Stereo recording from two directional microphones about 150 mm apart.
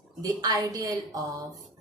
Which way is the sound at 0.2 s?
25° right (ahead or behind).